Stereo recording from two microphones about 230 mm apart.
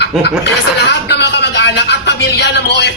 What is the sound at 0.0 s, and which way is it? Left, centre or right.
A woman's voice, left.